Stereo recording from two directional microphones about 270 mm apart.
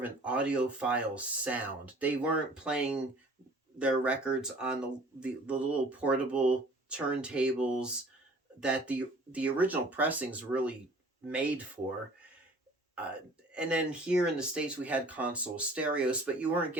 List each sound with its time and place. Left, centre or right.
0.0 s speech: centre
13.5 s speech: centre